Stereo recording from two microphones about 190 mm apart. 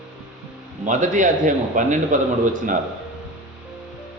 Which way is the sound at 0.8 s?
40° right (ahead or behind).